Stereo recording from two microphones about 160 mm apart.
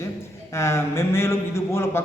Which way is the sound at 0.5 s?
15° left (ahead or behind).